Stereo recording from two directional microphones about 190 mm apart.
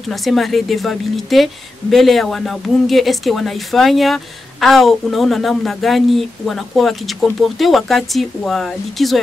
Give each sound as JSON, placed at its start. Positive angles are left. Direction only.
{"t": 0.1, "sound": "a woman's voice", "side_deg": 0}